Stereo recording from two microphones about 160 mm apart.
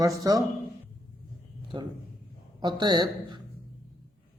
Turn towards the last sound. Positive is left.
turn(degrees=-25)  # may be behind; listen again after turning